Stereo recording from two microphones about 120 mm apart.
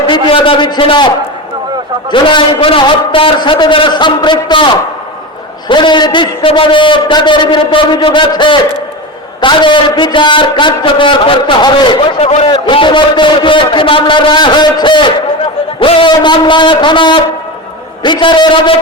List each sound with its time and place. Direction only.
0.1 s a man's voice: 45° left (ahead or behind)